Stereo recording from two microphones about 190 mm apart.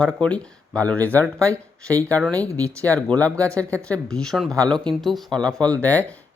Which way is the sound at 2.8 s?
10° left (ahead or behind).